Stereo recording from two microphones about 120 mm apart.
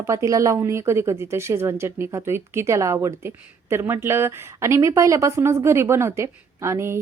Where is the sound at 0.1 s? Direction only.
25° right (ahead or behind).